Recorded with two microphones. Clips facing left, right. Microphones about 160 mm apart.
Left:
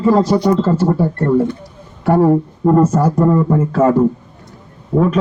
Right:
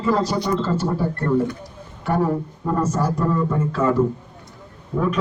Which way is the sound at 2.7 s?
25° left (ahead or behind).